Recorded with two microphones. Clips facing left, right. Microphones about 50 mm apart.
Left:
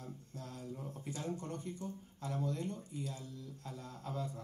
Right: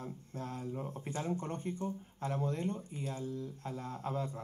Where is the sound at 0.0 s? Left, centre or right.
Right.